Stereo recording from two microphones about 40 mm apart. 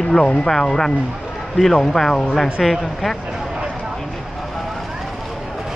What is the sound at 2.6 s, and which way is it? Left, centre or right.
Speech, centre.